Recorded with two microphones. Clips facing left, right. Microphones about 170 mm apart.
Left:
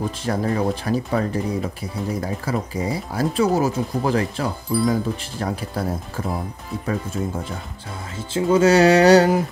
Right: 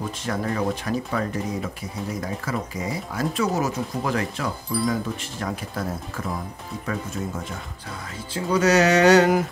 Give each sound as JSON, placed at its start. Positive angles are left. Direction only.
{"t": 0.3, "sound": "speech", "side_deg": 30}
{"t": 8.3, "sound": "speech", "side_deg": 25}